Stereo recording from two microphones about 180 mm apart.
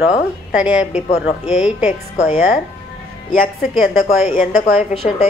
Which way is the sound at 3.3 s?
50° left (ahead or behind).